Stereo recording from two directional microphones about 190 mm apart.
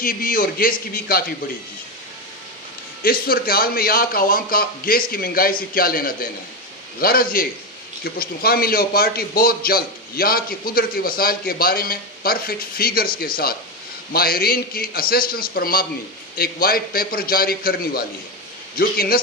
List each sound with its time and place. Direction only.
0.0 s a man's voice: 50° left (ahead or behind)
3.0 s a man's voice: 50° left (ahead or behind)